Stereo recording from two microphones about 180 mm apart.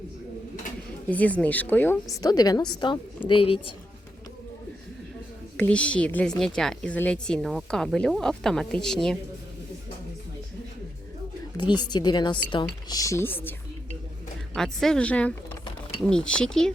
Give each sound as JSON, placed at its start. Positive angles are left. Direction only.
{"t": 1.1, "sound": "a woman's voice", "side_deg": 10}
{"t": 5.5, "sound": "a woman's voice", "side_deg": 5}
{"t": 11.5, "sound": "speech", "side_deg": 25}